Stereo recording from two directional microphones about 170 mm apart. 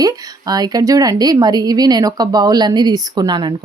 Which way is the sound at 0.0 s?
25° right (ahead or behind).